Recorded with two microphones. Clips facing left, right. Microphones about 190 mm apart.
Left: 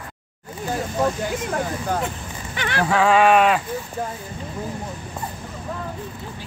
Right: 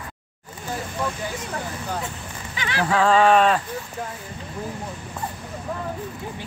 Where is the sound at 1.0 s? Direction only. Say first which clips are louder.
Left 7 dB; 50° left (ahead or behind).